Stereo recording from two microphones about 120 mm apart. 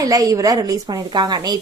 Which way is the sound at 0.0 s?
30° right (ahead or behind).